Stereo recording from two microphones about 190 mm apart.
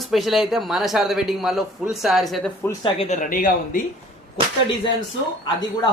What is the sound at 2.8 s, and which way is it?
Speech, 35° left (ahead or behind).